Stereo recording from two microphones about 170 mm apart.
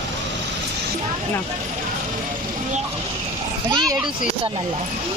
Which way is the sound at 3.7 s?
20° right (ahead or behind).